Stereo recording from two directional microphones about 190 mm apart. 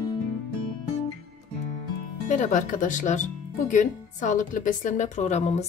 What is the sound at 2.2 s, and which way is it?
A woman's voice, 40° left (ahead or behind).